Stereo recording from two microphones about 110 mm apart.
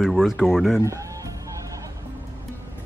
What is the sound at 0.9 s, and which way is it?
Music, 30° right (ahead or behind).